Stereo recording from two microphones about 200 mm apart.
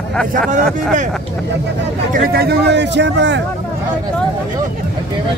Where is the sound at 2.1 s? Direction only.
50° right (ahead or behind).